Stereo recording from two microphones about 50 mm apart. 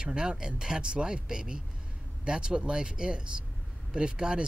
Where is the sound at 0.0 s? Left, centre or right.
Centre.